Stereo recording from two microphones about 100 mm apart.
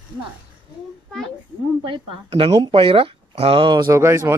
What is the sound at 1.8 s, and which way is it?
Speech, 60° right (ahead or behind).